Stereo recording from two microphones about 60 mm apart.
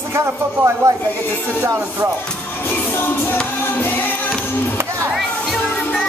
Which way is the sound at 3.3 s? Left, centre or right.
Left.